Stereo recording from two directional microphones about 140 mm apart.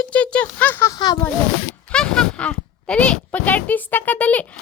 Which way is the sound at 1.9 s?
5° left (ahead or behind).